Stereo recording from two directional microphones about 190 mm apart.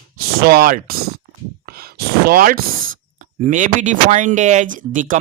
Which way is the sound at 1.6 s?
50° right (ahead or behind).